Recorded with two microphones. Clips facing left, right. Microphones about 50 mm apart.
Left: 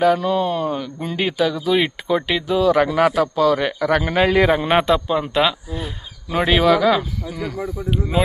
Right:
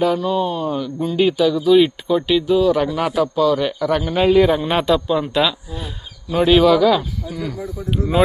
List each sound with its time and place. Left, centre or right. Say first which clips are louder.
0.0 s speech: left 1 dB; left
0.7 s speech: right 3 dB; left
4.7 s a man's voice: even; left